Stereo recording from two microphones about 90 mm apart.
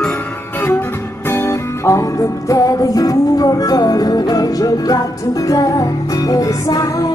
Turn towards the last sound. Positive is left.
turn(degrees=45)  # may be behind; listen again after turning